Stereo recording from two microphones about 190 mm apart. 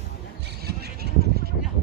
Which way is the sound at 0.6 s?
55° right (ahead or behind).